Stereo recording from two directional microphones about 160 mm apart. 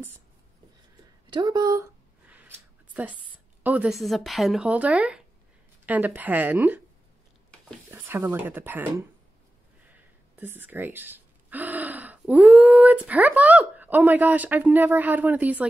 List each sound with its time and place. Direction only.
1.3 s speech: 25° right (ahead or behind)
2.2 s a sound: 10° right (ahead or behind)
3.6 s speech: 10° right (ahead or behind)
7.9 s speech: 15° right (ahead or behind)
10.3 s speech: 10° right (ahead or behind)